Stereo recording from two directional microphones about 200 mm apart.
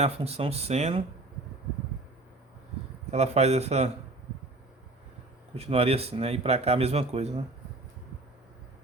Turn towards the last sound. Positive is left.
turn(degrees=-30)  # may be behind; listen again after turning